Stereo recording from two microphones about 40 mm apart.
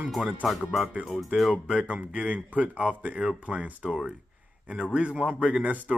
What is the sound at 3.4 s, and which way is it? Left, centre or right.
Speech, right.